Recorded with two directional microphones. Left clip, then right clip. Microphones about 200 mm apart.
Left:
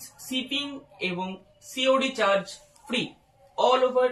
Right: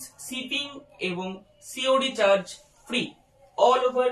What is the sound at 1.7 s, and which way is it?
Speech, 25° right (ahead or behind).